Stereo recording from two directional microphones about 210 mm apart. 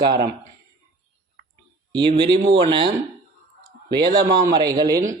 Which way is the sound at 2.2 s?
20° right (ahead or behind).